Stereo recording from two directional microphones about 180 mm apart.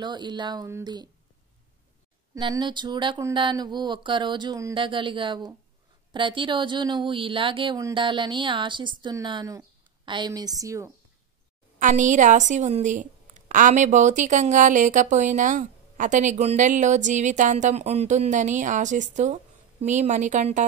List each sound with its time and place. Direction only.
0.0 s speech: 25° right (ahead or behind)
2.3 s speech: 25° right (ahead or behind)
11.8 s a woman's voice: 45° right (ahead or behind)